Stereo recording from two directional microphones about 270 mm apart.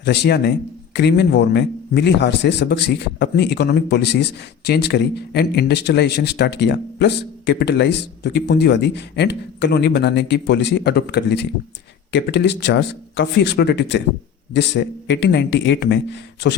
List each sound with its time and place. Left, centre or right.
0.0 s a man's voice: left